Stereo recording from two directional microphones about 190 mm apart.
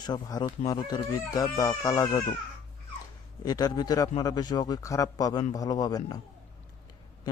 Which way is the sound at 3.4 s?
20° left (ahead or behind).